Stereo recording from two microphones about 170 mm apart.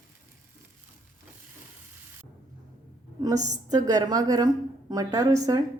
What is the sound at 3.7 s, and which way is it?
A woman's voice, 20° right (ahead or behind).